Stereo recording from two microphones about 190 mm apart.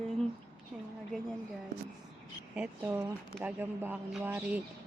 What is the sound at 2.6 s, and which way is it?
Speech, 5° right (ahead or behind).